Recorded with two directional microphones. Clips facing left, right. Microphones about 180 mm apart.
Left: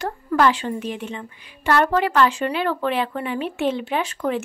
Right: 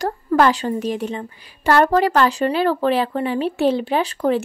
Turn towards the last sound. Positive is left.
turn(degrees=-35)  # may be behind; listen again after turning